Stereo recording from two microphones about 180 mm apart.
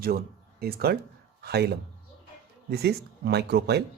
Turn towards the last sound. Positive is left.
turn(degrees=-65)  # may be behind; listen again after turning